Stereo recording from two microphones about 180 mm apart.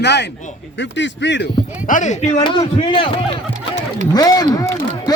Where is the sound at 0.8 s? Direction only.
85° left.